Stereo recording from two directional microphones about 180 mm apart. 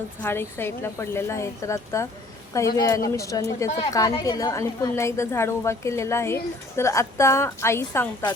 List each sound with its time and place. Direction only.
0.2 s a woman's voice: 15° left (ahead or behind)